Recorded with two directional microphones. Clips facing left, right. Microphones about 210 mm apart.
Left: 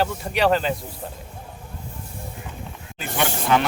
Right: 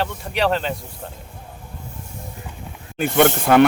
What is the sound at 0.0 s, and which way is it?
Speech, centre (ahead or behind).